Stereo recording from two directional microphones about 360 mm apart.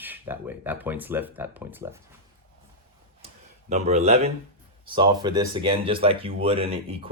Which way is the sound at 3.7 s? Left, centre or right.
Centre.